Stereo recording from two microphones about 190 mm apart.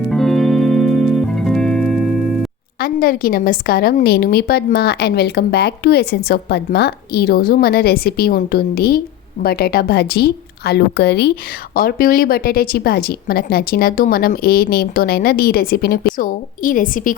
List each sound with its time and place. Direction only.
0.1 s music: centre (ahead or behind)
2.8 s a woman's voice: 50° left (ahead or behind)